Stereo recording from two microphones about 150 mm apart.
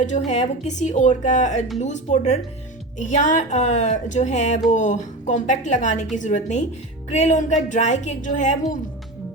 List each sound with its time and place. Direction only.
0.3 s a woman's voice: 45° left (ahead or behind)